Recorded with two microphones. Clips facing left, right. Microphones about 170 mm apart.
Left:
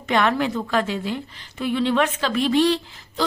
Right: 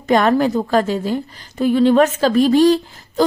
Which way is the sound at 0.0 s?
40° right (ahead or behind).